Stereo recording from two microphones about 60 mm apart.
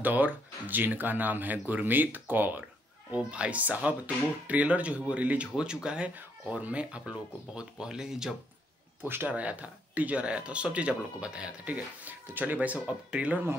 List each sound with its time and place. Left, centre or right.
0.0 s speech: right
3.1 s speech: right
9.0 s speech: right
9.3 s speech: right
11.6 s speech: right